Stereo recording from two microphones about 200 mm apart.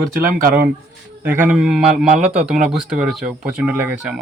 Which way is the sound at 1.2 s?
10° right (ahead or behind).